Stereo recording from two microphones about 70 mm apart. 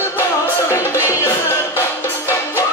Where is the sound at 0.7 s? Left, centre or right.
Left.